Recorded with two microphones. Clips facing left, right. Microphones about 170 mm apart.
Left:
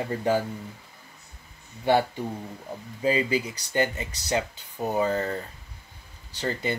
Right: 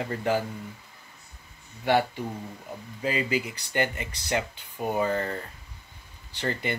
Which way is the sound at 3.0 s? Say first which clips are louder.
Left 3 dB; 30° left (ahead or behind).